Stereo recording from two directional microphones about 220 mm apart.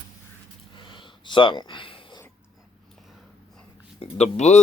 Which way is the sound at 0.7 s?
20° left (ahead or behind).